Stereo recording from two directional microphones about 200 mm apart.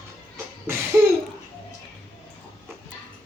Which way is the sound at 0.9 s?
10° right (ahead or behind).